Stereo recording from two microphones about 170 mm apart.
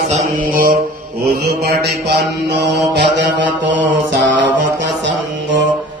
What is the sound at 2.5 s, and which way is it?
Mantra, 90° right.